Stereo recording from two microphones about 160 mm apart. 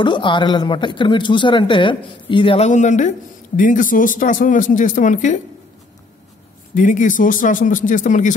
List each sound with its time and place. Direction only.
0.0 s speech: 30° left (ahead or behind); by 5.4 s 50° left (ahead or behind)
6.7 s speech: 55° left (ahead or behind)